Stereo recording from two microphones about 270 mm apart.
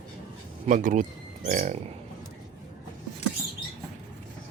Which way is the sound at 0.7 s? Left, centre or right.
Right.